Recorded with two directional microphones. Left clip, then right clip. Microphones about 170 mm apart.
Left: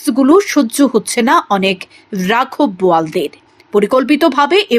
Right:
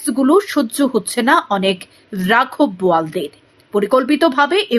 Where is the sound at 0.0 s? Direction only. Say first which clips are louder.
Left 4 dB; 15° left (ahead or behind).